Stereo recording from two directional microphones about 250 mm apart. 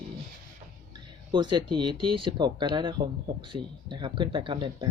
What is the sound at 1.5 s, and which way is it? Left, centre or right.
Speech, centre.